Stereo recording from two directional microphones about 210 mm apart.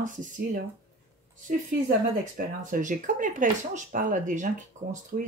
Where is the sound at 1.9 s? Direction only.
40° right (ahead or behind).